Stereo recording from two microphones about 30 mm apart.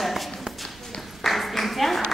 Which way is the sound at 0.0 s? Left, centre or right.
Centre.